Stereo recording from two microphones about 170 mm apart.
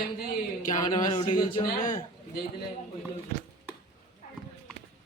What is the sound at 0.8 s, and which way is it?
Speech, 25° left (ahead or behind).